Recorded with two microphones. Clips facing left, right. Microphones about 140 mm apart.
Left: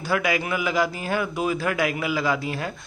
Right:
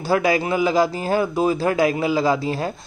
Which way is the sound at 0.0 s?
30° right (ahead or behind).